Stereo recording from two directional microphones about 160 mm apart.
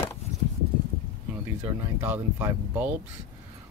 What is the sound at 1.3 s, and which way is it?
Speech, 10° right (ahead or behind).